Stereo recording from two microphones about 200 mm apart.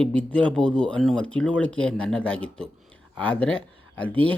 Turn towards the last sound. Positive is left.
turn(degrees=-25)  # may be behind; listen again after turning